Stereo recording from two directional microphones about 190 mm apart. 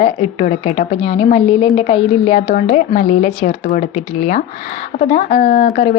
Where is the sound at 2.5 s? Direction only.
50° left (ahead or behind).